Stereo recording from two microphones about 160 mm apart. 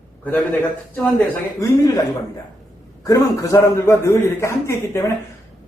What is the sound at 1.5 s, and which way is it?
Speech, 20° left (ahead or behind).